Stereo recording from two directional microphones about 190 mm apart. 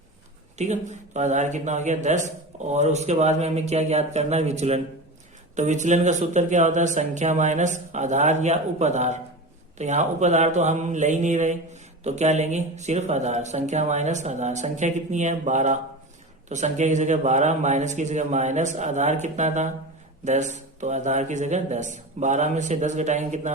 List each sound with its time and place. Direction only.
0.6 s speech: 40° right (ahead or behind)